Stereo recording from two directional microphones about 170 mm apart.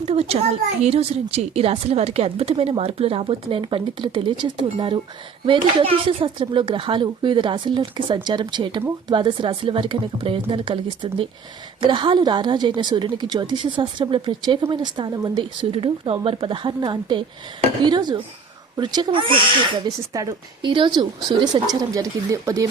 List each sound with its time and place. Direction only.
0.1 s a woman's voice: 35° right (ahead or behind); by 15.4 s 20° right (ahead or behind)
15.7 s speech: 30° right (ahead or behind)